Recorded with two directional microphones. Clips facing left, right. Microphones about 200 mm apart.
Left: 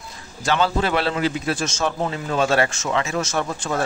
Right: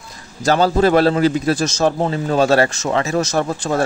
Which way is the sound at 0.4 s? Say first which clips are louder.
Right 6 dB; 40° right (ahead or behind).